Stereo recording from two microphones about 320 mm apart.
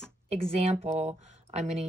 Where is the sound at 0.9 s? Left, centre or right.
Centre.